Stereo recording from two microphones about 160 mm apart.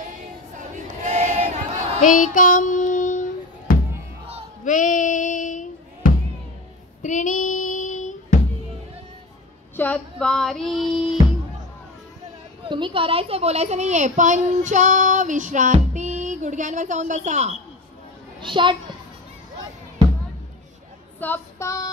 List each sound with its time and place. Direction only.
0.6 s crowd: 50° right (ahead or behind)
2.0 s child singing: 55° left (ahead or behind)
4.6 s a sound: 55° left (ahead or behind)
9.8 s female singing: 10° left (ahead or behind)
12.6 s a child's voice: 30° right (ahead or behind); by 17.6 s 45° right (ahead or behind)
18.4 s a child's voice: 30° right (ahead or behind)
21.2 s child singing: 15° left (ahead or behind)